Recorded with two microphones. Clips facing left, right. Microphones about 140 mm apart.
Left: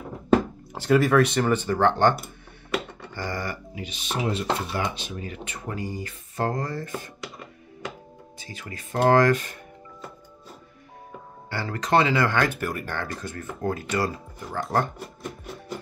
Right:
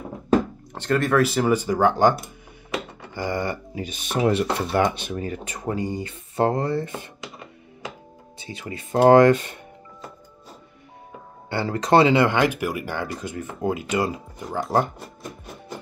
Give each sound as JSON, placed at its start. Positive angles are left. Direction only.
{"t": 0.7, "sound": "speech", "side_deg": 5}
{"t": 3.2, "sound": "speech", "side_deg": -20}
{"t": 3.7, "sound": "speech", "side_deg": -45}
{"t": 4.2, "sound": "speech", "side_deg": -65}
{"t": 8.5, "sound": "speech", "side_deg": -30}
{"t": 11.5, "sound": "speech", "side_deg": -30}